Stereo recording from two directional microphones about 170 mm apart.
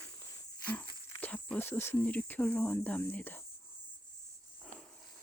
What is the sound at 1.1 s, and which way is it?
Speech, 10° left (ahead or behind).